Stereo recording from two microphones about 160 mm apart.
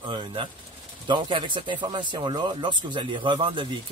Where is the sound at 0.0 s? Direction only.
30° right (ahead or behind).